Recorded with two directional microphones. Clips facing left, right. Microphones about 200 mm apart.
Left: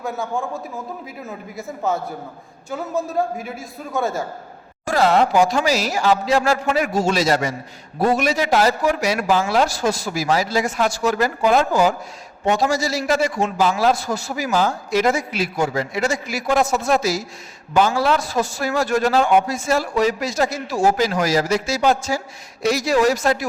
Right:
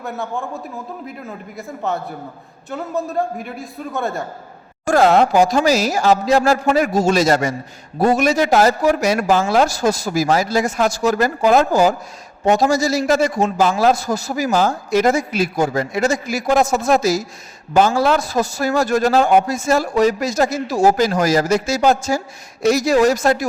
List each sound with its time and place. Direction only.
1.5 s a man's voice: centre (ahead or behind)
4.9 s a man's voice: 50° right (ahead or behind)